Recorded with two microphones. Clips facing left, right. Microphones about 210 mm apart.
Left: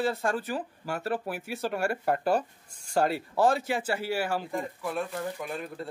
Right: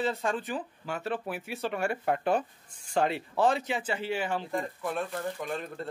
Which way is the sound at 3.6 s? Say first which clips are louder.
Left 2 dB; 10° left (ahead or behind).